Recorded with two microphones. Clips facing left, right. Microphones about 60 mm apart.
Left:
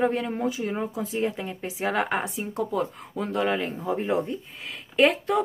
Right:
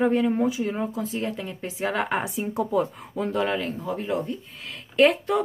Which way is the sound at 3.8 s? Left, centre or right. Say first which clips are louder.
Left 2 dB; left.